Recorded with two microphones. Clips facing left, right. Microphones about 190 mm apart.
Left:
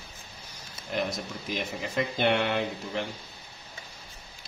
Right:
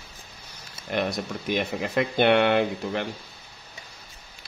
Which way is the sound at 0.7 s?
65° right (ahead or behind).